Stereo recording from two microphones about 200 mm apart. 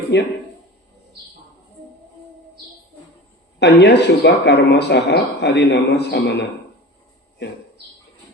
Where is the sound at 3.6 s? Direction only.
60° left (ahead or behind).